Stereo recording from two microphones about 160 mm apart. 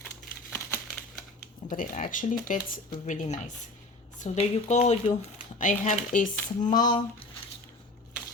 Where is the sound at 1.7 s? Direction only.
55° left (ahead or behind).